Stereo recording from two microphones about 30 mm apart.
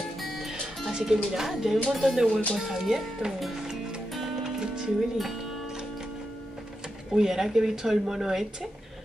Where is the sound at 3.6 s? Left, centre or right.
Right.